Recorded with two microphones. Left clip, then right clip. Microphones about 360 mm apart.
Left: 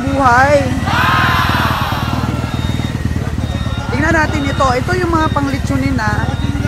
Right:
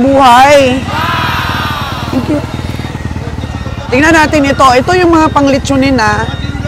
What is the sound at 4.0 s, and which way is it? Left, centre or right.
Speech, right.